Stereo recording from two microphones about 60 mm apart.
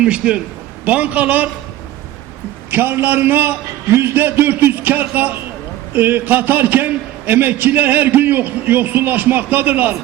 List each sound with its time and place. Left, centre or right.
0.0 s a man's voice: centre
2.6 s a man's voice: right